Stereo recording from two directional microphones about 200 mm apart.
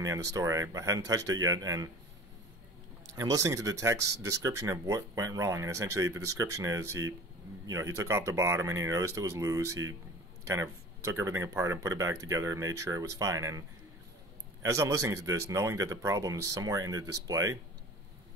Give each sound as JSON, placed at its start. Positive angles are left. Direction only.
{"t": 0.0, "sound": "speech", "side_deg": -15}
{"t": 3.2, "sound": "speech", "side_deg": -15}